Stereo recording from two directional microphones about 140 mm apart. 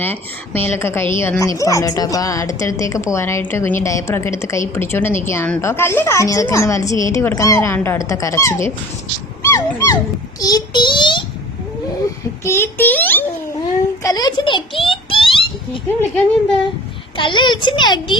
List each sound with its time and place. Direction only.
0.0 s a woman's voice: 15° left (ahead or behind)
9.4 s dog: 20° left (ahead or behind)
10.4 s a child's voice: 30° left (ahead or behind)
12.5 s a woman's voice: 15° left (ahead or behind)
14.0 s a sound: 25° left (ahead or behind)
17.2 s a child's voice: 35° left (ahead or behind)